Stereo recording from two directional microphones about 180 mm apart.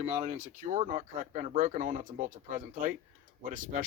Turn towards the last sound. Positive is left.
turn(degrees=-45)  # may be behind; listen again after turning